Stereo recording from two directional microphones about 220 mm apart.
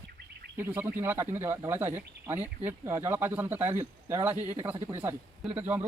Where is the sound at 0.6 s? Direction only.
10° right (ahead or behind).